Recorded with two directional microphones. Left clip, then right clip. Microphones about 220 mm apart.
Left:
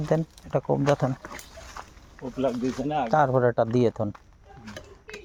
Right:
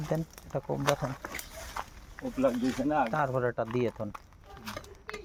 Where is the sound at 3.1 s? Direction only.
45° left (ahead or behind).